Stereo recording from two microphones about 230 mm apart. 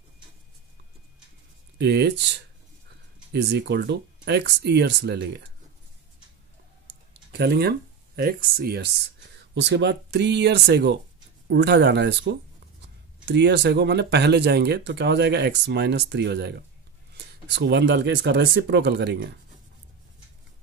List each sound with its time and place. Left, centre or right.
1.8 s speech: right
7.3 s speech: right